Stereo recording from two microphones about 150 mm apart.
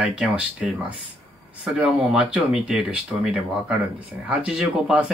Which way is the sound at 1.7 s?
5° right (ahead or behind).